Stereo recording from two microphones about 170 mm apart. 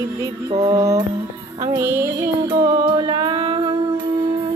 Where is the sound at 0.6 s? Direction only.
25° right (ahead or behind).